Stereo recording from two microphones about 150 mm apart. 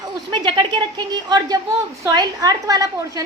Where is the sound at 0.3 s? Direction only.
30° right (ahead or behind).